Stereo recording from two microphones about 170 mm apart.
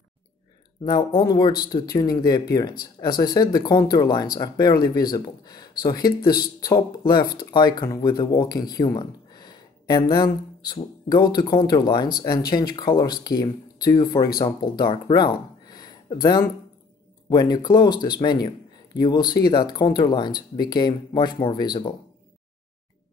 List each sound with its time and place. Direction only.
0.8 s speech: 25° left (ahead or behind)